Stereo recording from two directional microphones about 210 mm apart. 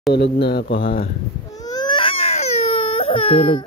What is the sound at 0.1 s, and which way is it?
Speech, 50° left (ahead or behind).